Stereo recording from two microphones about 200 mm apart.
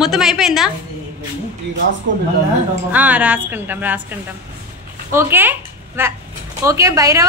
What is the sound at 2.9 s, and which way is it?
A woman's voice, 5° right (ahead or behind).